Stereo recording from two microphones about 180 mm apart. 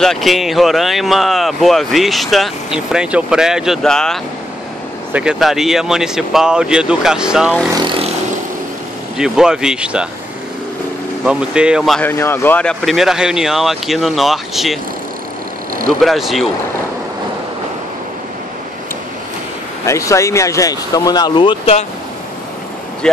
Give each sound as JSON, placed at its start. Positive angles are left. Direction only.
{"t": 0.0, "sound": "speech", "side_deg": 0}
{"t": 7.7, "sound": "speech", "side_deg": -25}
{"t": 9.2, "sound": "speech", "side_deg": -5}
{"t": 11.2, "sound": "speech", "side_deg": -5}
{"t": 12.0, "sound": "speech", "side_deg": 10}
{"t": 16.0, "sound": "speech", "side_deg": 0}
{"t": 19.8, "sound": "speech", "side_deg": 15}